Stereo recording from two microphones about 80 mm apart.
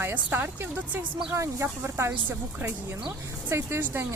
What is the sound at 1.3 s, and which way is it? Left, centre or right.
Speech, right.